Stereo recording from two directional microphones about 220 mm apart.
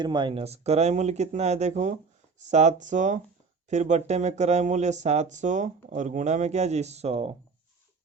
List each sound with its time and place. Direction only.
0.0 s speech: 20° right (ahead or behind)